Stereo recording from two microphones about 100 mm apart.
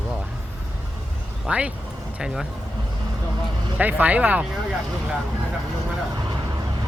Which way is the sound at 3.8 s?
15° right (ahead or behind).